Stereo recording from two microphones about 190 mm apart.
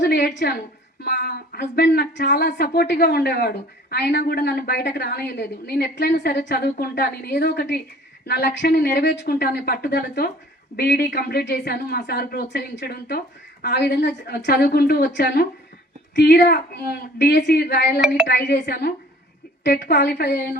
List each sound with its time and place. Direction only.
0.0 s a woman's voice: 60° left (ahead or behind)